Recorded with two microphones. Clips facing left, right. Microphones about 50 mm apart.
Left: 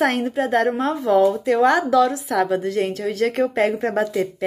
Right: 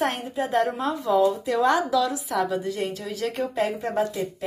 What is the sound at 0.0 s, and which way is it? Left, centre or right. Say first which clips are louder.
A woman's voice: left 6 dB; left.